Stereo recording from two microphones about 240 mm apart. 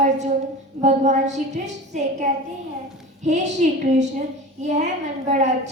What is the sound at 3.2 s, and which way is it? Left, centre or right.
Speech, right.